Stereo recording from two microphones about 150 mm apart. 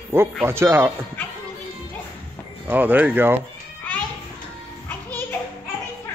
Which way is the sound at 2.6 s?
10° right (ahead or behind).